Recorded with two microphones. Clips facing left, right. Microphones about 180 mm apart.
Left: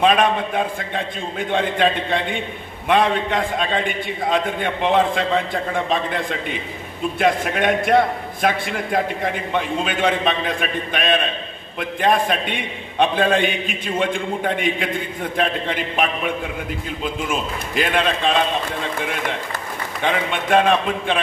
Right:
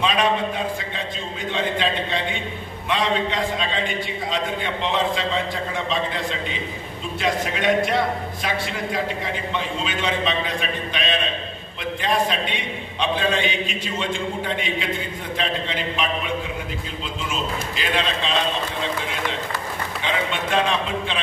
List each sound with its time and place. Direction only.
0.0 s a man's voice: 55° left (ahead or behind)